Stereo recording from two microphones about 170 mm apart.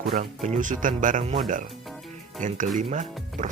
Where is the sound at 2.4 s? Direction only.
45° right (ahead or behind).